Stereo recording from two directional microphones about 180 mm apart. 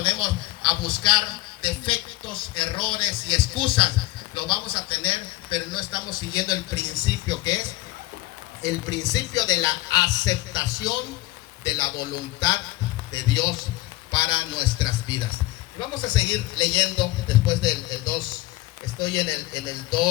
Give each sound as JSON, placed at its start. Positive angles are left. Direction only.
{"t": 0.0, "sound": "a sound", "side_deg": 25}
{"t": 1.6, "sound": "a man's voice", "side_deg": 30}
{"t": 8.6, "sound": "a man's voice", "side_deg": 20}